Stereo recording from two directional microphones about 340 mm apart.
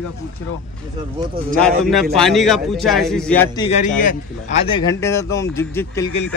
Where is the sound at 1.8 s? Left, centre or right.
Centre.